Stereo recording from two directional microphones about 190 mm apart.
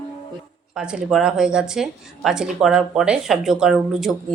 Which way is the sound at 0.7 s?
5° right (ahead or behind).